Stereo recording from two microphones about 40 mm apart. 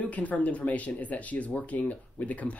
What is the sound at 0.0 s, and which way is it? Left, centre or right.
Speech, left.